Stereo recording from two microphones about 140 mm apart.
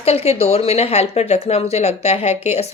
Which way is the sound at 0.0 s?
50° left (ahead or behind).